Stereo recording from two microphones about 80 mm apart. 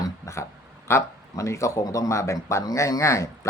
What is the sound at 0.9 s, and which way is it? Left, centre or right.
Speech, left.